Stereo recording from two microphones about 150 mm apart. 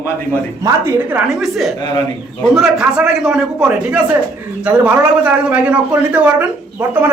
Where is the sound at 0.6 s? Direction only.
15° right (ahead or behind).